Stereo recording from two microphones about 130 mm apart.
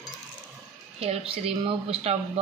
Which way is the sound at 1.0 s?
50° right (ahead or behind).